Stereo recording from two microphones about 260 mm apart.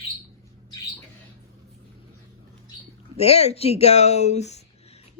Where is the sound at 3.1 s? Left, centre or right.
Left.